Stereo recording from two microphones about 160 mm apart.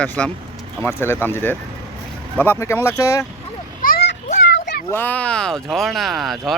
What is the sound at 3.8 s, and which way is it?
Children playing, 80° left.